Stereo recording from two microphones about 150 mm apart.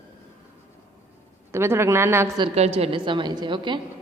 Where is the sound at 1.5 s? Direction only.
15° right (ahead or behind).